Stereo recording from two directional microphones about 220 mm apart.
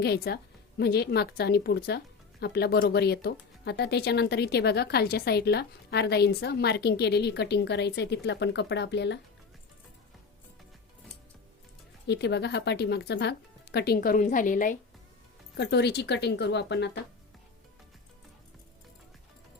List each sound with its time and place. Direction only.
0.0 s speech: 45° left (ahead or behind)
12.0 s speech: 50° left (ahead or behind)
15.5 s speech: 50° left (ahead or behind)